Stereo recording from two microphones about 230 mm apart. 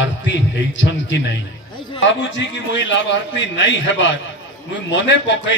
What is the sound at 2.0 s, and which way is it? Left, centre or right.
A man's voice, left.